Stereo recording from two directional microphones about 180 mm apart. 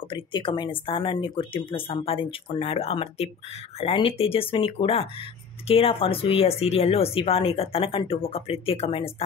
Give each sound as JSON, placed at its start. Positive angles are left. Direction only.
{"t": 0.1, "sound": "speech", "side_deg": 25}